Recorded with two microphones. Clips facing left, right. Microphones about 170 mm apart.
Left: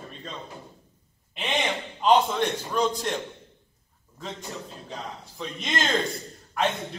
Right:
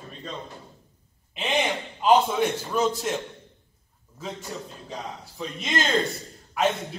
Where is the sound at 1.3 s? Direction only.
Centre (ahead or behind).